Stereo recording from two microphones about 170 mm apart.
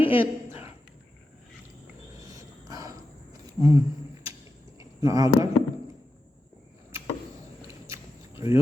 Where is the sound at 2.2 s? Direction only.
20° right (ahead or behind).